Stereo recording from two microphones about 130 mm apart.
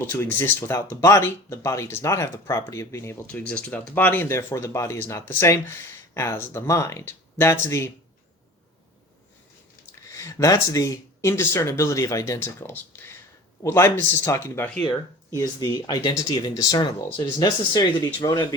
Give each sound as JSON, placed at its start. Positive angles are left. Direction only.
{"t": 0.0, "sound": "speech", "side_deg": 20}
{"t": 10.1, "sound": "speech", "side_deg": 25}